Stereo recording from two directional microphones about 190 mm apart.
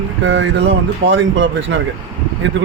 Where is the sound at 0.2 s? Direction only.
75° right (ahead or behind).